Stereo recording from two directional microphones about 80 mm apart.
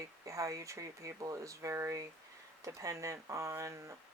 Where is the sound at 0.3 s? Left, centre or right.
Right.